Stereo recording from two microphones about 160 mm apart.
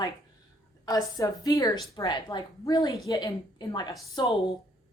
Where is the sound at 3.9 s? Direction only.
Centre (ahead or behind).